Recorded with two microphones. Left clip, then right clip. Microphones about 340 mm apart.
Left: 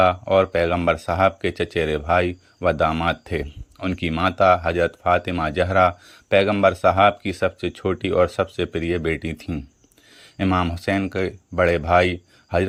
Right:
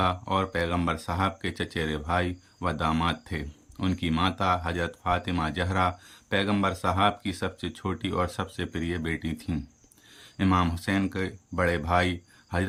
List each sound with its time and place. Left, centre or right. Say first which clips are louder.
0.0 s speech: left 10 dB; centre